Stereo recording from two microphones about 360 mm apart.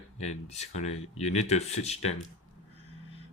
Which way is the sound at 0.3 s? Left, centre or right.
Centre.